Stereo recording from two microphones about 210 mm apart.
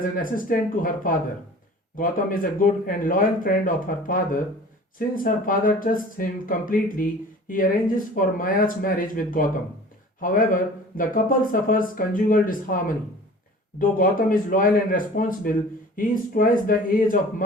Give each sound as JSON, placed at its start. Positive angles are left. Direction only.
{"t": 0.0, "sound": "speech", "side_deg": 40}